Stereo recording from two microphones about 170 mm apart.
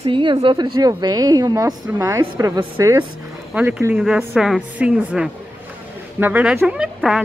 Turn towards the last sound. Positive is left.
turn(degrees=-5)  # may be behind; listen again after turning